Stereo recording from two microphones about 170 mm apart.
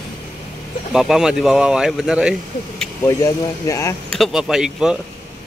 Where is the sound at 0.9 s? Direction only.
5° right (ahead or behind).